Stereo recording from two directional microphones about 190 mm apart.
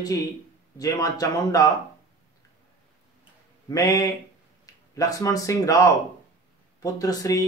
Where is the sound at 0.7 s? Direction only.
20° left (ahead or behind).